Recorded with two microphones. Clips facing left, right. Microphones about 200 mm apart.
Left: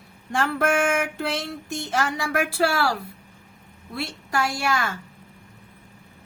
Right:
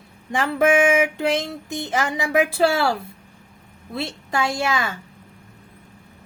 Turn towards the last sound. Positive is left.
turn(degrees=-20)  # may be behind; listen again after turning